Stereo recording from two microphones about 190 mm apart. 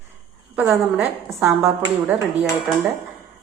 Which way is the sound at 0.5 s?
10° right (ahead or behind).